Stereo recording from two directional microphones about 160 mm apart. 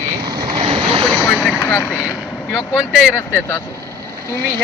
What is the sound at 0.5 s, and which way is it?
Boat, 35° right (ahead or behind).